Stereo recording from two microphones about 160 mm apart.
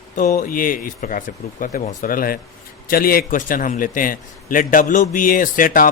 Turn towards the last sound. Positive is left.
turn(degrees=60)  # may be behind; listen again after turning